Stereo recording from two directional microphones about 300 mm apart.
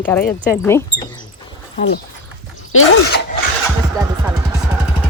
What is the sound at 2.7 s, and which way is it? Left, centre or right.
Speech, left.